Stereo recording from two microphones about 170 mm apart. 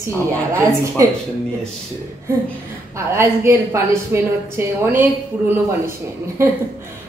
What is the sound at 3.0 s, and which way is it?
A woman's voice, 15° right (ahead or behind).